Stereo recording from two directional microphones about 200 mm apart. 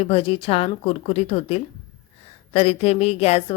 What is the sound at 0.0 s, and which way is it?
A woman's voice, 30° left (ahead or behind).